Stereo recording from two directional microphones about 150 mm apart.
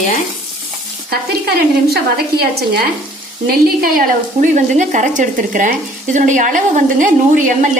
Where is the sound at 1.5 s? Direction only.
90° right.